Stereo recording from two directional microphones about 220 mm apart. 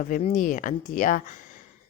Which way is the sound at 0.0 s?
35° left (ahead or behind).